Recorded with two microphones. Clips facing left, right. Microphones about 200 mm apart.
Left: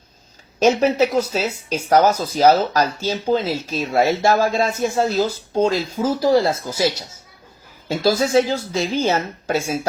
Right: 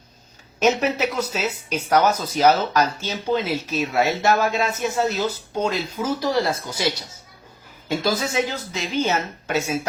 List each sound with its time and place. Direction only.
0.6 s speech: 30° left (ahead or behind)
7.9 s speech: 30° left (ahead or behind)